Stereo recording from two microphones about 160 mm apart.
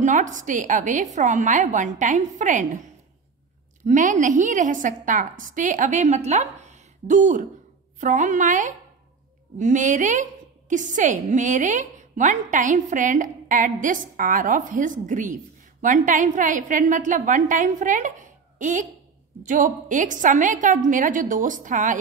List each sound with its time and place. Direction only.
0.0 s a woman's voice: 50° right (ahead or behind)
3.8 s a woman's voice: 50° right (ahead or behind)